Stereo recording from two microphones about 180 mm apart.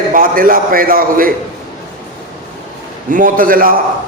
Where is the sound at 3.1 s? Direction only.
50° right (ahead or behind).